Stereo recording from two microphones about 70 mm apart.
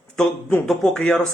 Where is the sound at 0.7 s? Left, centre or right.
Centre.